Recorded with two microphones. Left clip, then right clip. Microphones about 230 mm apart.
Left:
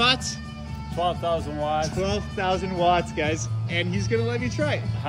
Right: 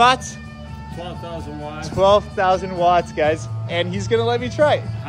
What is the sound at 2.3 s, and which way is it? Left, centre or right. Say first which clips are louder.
Speech: right 7 dB; centre.